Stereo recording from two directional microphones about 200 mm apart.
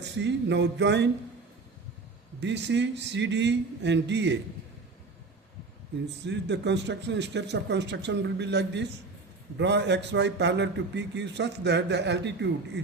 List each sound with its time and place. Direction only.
0.0 s a man's voice: 60° right (ahead or behind)
2.4 s a man's voice: 60° right (ahead or behind)
6.2 s a man's voice: 60° right (ahead or behind)